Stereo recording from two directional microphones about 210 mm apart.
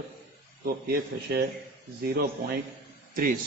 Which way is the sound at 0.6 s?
45° right (ahead or behind).